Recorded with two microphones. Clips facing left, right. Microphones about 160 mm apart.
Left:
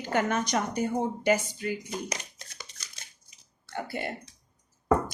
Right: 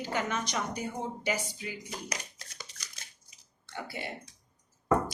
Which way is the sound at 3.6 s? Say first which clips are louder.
Left 5 dB; 50° left (ahead or behind).